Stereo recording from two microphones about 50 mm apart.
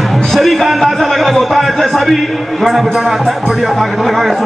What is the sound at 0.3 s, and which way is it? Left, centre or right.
A man's voice, centre.